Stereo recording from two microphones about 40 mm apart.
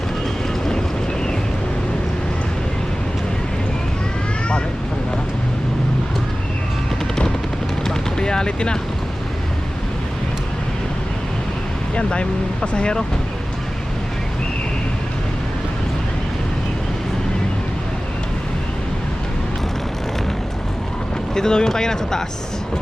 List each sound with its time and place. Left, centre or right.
7.9 s vehicle: centre
11.9 s speech: left
21.3 s speech: centre